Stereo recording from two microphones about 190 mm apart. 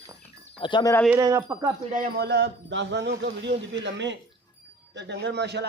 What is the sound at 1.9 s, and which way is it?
A man's voice, 50° right (ahead or behind).